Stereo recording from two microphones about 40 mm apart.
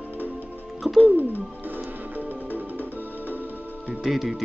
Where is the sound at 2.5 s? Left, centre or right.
Left.